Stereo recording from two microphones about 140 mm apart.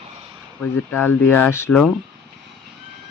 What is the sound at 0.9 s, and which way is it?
Speech, 15° left (ahead or behind).